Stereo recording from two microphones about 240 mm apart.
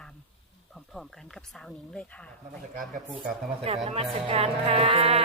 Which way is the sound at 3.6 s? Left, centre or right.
Right.